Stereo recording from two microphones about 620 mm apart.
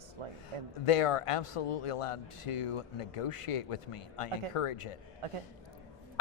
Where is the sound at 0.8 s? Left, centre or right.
Left.